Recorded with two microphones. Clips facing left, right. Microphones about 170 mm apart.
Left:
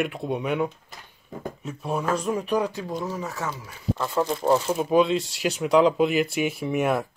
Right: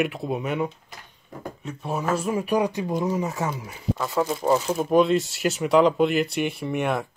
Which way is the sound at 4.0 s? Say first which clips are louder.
Even; centre (ahead or behind).